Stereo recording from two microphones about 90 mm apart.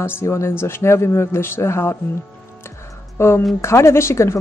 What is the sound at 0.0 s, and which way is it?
Speech, 30° left (ahead or behind).